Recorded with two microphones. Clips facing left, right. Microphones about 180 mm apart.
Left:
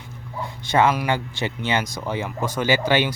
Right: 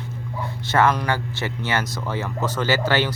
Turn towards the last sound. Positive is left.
turn(degrees=15)  # may be behind; listen again after turning